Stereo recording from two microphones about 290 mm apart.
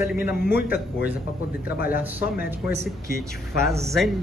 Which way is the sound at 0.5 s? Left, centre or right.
Left.